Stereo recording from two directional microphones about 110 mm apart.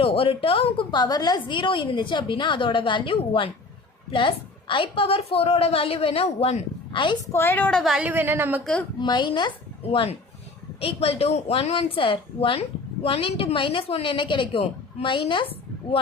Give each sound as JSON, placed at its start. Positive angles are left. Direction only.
{"t": 0.0, "sound": "a woman's voice", "side_deg": 55}
{"t": 6.9, "sound": "a woman's voice", "side_deg": 45}
{"t": 7.3, "sound": "a woman's voice", "side_deg": 20}
{"t": 7.8, "sound": "a woman's voice", "side_deg": 0}
{"t": 8.0, "sound": "speech", "side_deg": -15}
{"t": 8.6, "sound": "a woman's voice", "side_deg": 10}
{"t": 9.0, "sound": "a woman's voice", "side_deg": 45}
{"t": 10.8, "sound": "a woman's voice", "side_deg": 60}